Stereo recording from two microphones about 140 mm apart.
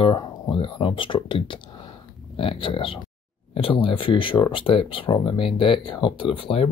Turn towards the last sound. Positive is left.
turn(degrees=40)  # may be behind; listen again after turning